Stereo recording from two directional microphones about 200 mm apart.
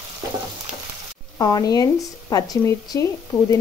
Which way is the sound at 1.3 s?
20° left (ahead or behind).